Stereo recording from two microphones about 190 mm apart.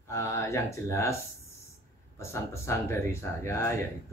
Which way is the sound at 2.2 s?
15° left (ahead or behind).